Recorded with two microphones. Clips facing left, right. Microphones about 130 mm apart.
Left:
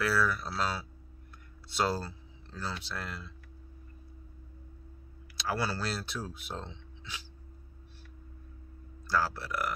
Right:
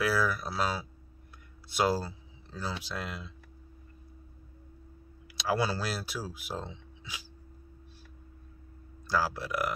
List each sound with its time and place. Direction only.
0.0 s speech: 15° right (ahead or behind)
5.4 s speech: 15° right (ahead or behind)
9.0 s speech: 15° right (ahead or behind)